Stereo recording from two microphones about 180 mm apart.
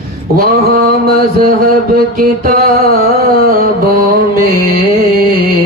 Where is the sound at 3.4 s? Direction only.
55° right (ahead or behind).